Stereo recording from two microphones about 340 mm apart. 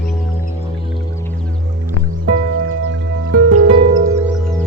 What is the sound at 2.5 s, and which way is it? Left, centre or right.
Music, right.